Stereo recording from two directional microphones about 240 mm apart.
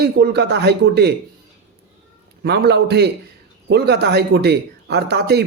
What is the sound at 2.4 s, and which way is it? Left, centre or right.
Speech, right.